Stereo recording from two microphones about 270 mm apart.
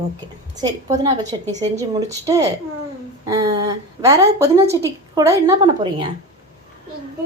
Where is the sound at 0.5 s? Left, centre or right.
Centre.